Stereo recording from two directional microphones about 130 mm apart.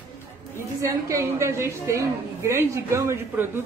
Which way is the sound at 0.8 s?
25° right (ahead or behind).